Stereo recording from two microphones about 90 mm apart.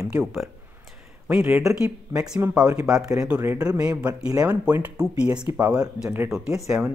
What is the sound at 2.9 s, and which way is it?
Speech, 5° right (ahead or behind).